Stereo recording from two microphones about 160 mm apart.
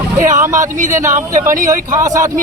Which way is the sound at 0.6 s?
50° right (ahead or behind).